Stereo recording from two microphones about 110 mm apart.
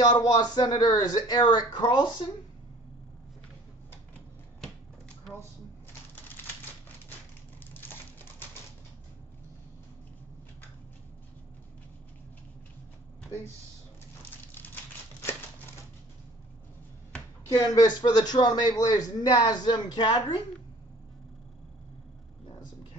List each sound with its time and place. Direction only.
0.1 s a man's voice: 40° left (ahead or behind)
7.7 s typewriter: 20° left (ahead or behind)
14.5 s typewriter: 20° left (ahead or behind)
17.7 s a man's voice: 40° left (ahead or behind)